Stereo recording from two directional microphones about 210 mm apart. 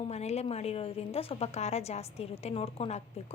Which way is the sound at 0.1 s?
30° left (ahead or behind).